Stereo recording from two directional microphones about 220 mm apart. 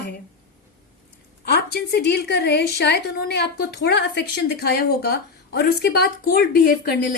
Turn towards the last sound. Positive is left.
turn(degrees=40)  # may be behind; listen again after turning